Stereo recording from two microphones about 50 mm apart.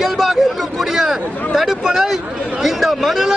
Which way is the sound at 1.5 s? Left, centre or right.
Centre.